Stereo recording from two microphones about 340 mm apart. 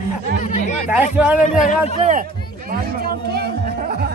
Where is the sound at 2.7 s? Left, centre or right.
Right.